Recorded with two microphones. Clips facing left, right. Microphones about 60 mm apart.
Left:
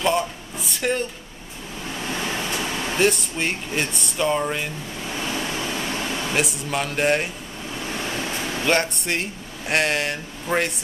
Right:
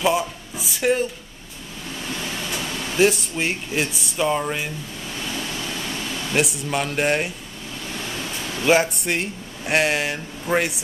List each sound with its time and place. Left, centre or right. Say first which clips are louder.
0.0 s a sound: right 1 dB; centre
2.1 s a sound: left 3 dB; left
3.0 s speech: right 3 dB; centre
5.3 s pink noise: left 2 dB; left
6.3 s speech: right 4 dB; centre
8.0 s waves: left 3 dB; left
8.6 s speech: right 4 dB; centre